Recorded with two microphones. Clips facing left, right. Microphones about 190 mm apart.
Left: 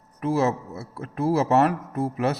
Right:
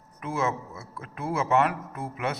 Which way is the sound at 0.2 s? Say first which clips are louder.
Left 6 dB; 35° left (ahead or behind).